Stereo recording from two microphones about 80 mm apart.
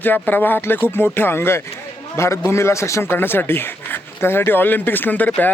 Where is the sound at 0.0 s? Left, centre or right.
Left.